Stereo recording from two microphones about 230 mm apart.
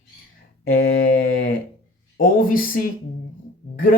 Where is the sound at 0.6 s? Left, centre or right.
Left.